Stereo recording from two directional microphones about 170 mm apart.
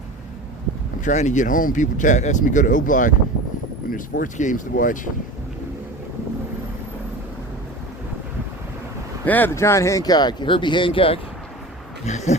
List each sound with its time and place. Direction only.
1.0 s speech: 45° left (ahead or behind)
9.2 s speech: 10° left (ahead or behind); by 11.2 s 30° left (ahead or behind)
12.0 s speech: 40° left (ahead or behind)